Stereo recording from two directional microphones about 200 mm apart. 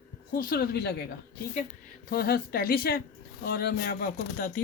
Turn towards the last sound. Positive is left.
turn(degrees=45)  # may be behind; listen again after turning